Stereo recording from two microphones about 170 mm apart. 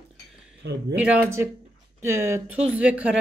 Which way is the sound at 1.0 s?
10° right (ahead or behind).